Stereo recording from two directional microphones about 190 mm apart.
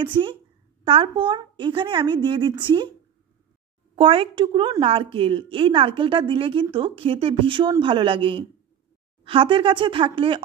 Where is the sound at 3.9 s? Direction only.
30° right (ahead or behind).